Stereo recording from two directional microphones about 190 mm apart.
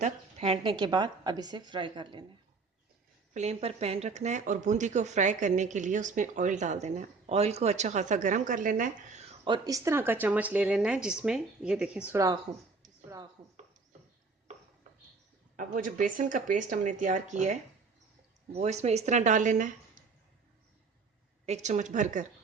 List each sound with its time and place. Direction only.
0.0 s a woman's voice: 30° right (ahead or behind)
3.3 s speech: 35° right (ahead or behind)
9.4 s speech: 20° right (ahead or behind); by 12.1 s 5° right (ahead or behind)
12.1 s a woman's voice: 20° right (ahead or behind)
15.5 s speech: 45° right (ahead or behind)
21.4 s speech: 35° right (ahead or behind)